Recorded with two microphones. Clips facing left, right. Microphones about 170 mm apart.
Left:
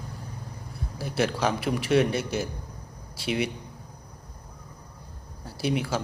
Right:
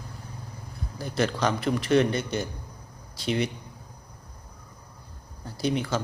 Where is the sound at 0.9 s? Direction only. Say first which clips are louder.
Even; 5° left (ahead or behind).